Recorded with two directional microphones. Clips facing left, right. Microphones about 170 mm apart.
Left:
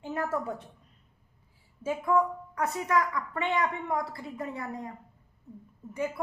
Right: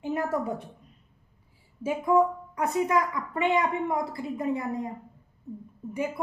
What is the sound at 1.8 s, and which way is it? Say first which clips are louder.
Speech: right 4 dB; 15° right (ahead or behind).